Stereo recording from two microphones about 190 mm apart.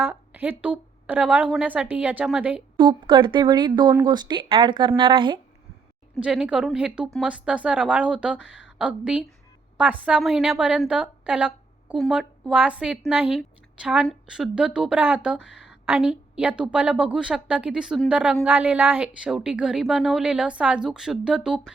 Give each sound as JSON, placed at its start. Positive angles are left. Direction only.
{"t": 0.0, "sound": "a woman's voice", "side_deg": -10}
{"t": 2.7, "sound": "speech", "side_deg": -25}
{"t": 6.1, "sound": "speech", "side_deg": -5}
{"t": 8.4, "sound": "speech", "side_deg": 75}
{"t": 8.8, "sound": "speech", "side_deg": -5}